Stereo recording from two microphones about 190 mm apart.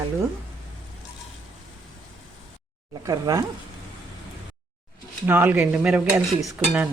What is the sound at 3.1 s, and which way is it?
Stir, 20° right (ahead or behind).